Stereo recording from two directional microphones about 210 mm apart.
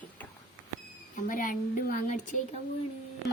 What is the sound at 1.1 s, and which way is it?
Speech, 40° left (ahead or behind).